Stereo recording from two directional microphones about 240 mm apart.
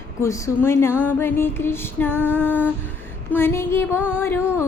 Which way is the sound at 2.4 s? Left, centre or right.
Centre.